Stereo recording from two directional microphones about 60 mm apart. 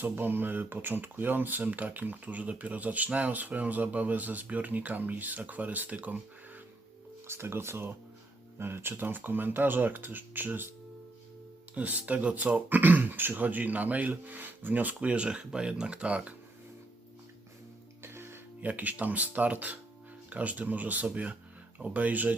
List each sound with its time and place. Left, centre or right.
0.0 s speech: right
7.3 s speech: right
11.7 s speech: right
18.0 s music: right
18.6 s speech: right